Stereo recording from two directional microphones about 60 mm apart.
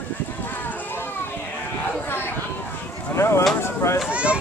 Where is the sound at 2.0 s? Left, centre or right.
Left.